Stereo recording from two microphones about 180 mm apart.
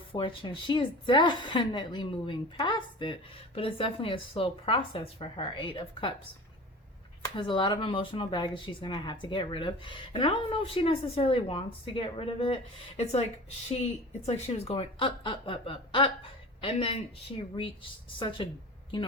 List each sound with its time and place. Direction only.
0.1 s speech: 30° left (ahead or behind)
7.3 s speech: 25° left (ahead or behind)
14.3 s speech: 35° left (ahead or behind)